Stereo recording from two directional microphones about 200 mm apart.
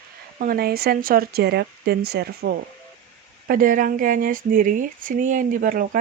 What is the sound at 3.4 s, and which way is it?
Speech, 45° right (ahead or behind).